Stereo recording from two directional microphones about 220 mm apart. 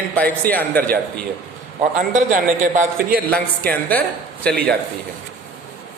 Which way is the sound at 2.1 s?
35° right (ahead or behind).